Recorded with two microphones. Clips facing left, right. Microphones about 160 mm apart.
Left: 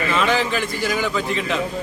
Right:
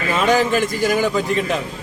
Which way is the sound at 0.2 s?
45° right (ahead or behind).